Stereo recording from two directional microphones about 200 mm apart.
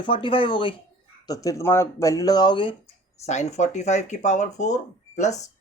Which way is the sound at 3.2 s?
35° left (ahead or behind).